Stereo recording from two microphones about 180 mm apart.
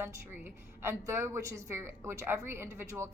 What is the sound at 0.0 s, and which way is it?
A woman's voice, 10° right (ahead or behind).